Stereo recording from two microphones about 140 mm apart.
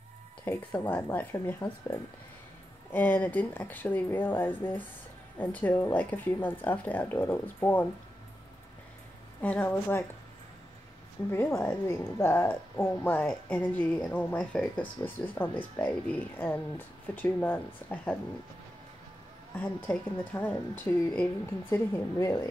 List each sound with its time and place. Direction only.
0.5 s a woman's voice: 15° left (ahead or behind)
2.9 s a woman's voice: 15° left (ahead or behind)
9.4 s a woman's voice: 10° left (ahead or behind)
11.2 s a woman's voice: 15° left (ahead or behind)
19.5 s a woman's voice: 10° left (ahead or behind)